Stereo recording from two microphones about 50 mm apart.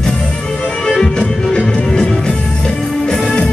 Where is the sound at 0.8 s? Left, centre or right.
Centre.